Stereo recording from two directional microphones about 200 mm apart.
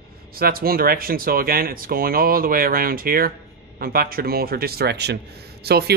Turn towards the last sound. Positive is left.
turn(degrees=-55)  # may be behind; listen again after turning